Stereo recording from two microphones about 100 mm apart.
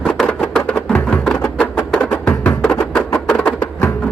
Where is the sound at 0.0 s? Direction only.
10° left (ahead or behind).